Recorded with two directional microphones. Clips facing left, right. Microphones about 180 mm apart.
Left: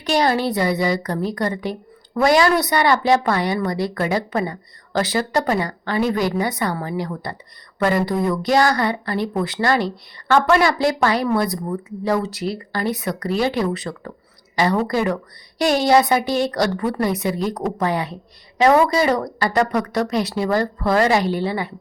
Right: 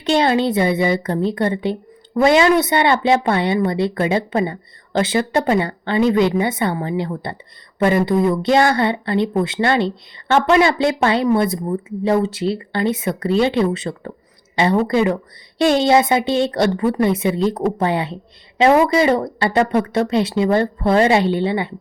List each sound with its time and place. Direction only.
0.0 s speech: 25° right (ahead or behind)